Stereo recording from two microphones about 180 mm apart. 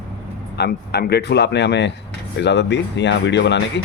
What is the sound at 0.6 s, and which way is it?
Speech, 60° left (ahead or behind).